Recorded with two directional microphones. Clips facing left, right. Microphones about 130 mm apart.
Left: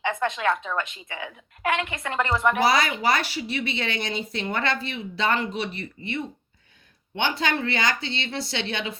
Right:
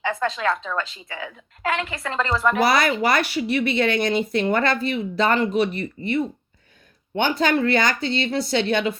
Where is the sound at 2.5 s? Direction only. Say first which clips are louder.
Right 3 dB; 55° right (ahead or behind).